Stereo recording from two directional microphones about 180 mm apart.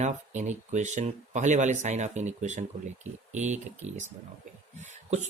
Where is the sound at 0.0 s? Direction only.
40° right (ahead or behind).